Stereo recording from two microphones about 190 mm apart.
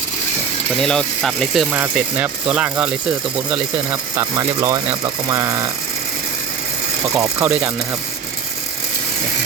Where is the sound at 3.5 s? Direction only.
20° right (ahead or behind).